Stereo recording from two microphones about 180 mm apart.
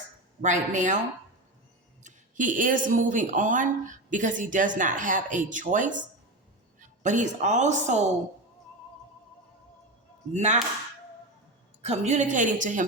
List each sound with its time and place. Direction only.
0.4 s speech: 45° right (ahead or behind)
2.0 s a woman's voice: 45° right (ahead or behind)
10.3 s speech: 40° right (ahead or behind)
11.8 s speech: 40° right (ahead or behind)